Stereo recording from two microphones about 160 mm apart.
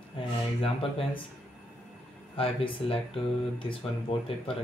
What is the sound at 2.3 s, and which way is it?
Speech, 35° left (ahead or behind).